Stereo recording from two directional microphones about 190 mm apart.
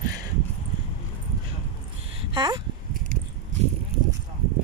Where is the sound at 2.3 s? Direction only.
25° right (ahead or behind).